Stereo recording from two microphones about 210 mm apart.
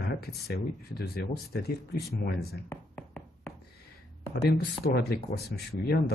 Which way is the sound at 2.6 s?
10° left (ahead or behind).